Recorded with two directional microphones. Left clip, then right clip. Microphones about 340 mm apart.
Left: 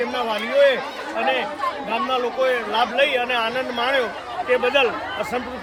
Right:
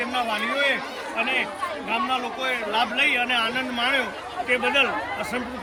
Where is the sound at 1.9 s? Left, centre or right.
Centre.